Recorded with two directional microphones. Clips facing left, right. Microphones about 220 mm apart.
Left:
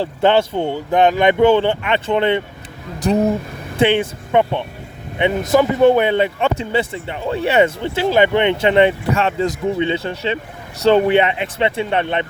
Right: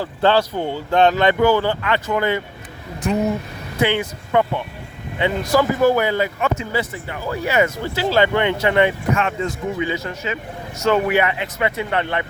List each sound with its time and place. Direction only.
0.0 s speech: 20° left (ahead or behind)
3.8 s speech: 30° left (ahead or behind)